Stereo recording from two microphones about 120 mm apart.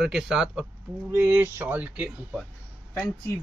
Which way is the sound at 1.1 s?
15° right (ahead or behind).